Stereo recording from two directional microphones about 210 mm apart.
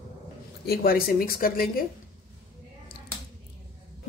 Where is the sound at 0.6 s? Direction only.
45° left (ahead or behind).